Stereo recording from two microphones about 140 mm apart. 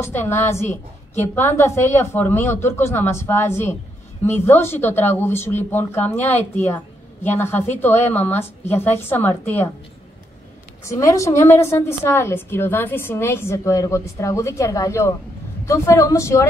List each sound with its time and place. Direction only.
0.0 s a woman's voice: 15° left (ahead or behind)
10.8 s a woman's voice: 20° left (ahead or behind)